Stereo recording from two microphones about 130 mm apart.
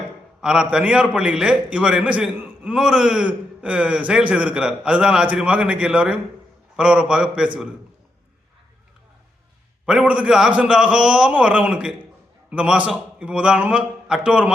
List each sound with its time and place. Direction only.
0.4 s a man's voice: 5° right (ahead or behind)
9.8 s a man's voice: 5° right (ahead or behind)